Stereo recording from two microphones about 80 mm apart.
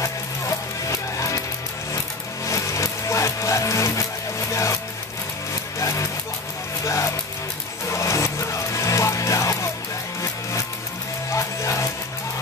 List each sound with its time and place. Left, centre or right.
0.0 s music: left
2.4 s music: left
5.8 s music: left
11.3 s music: left